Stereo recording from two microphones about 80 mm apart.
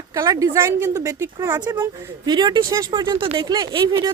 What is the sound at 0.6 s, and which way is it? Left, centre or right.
Speech, right.